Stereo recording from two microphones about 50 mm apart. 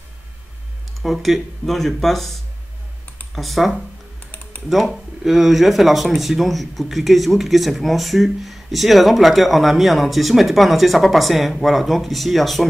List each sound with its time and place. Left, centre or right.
1.0 s speech: centre
4.2 s typing: left
4.6 s speech: centre